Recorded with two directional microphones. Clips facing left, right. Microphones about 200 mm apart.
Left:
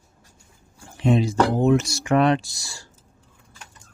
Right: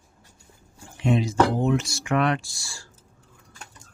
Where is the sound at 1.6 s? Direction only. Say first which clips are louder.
Left 5 dB; 45° left (ahead or behind); by 2.9 s 20° left (ahead or behind).